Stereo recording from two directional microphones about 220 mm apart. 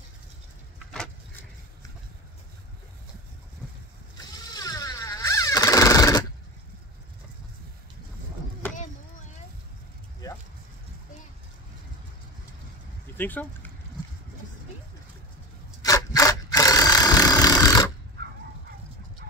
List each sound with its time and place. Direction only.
0.9 s vehicle: 5° left (ahead or behind)
4.6 s a sound: 15° left (ahead or behind)
13.2 s speech: 10° left (ahead or behind)
15.8 s engine: 15° left (ahead or behind)